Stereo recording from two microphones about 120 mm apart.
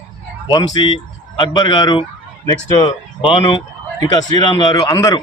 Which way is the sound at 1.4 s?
40° left (ahead or behind).